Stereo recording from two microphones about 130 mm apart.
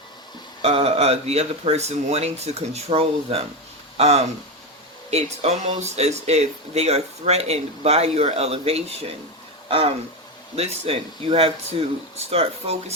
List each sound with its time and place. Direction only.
0.6 s speech: 50° right (ahead or behind)